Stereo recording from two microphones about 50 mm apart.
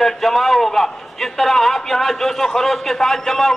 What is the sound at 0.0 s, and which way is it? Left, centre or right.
A man's voice, centre.